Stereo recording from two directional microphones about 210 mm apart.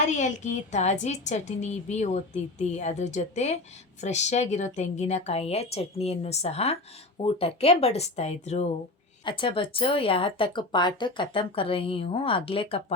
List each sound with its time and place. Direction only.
0.1 s a woman's voice: 35° left (ahead or behind)